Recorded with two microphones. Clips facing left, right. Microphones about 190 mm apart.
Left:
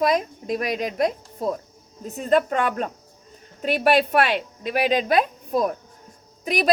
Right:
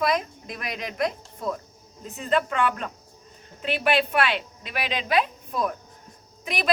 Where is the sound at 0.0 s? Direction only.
40° left (ahead or behind).